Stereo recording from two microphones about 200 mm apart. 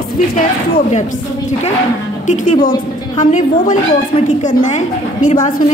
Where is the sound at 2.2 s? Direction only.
40° left (ahead or behind).